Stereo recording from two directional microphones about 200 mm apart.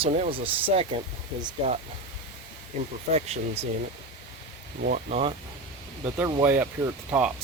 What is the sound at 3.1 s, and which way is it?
Speech, 30° right (ahead or behind).